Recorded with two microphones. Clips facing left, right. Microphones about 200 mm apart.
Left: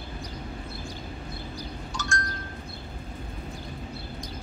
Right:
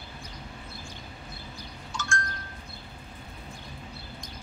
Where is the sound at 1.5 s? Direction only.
35° left (ahead or behind).